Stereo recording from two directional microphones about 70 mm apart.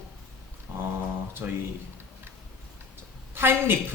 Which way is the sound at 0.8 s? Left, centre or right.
Right.